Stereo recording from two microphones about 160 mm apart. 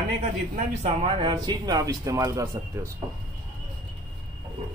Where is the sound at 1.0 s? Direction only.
30° right (ahead or behind).